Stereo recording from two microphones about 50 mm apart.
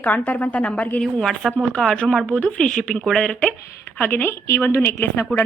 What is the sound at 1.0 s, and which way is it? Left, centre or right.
Speech, centre.